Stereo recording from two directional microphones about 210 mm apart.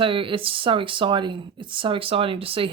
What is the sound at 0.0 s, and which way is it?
Speech, 25° right (ahead or behind).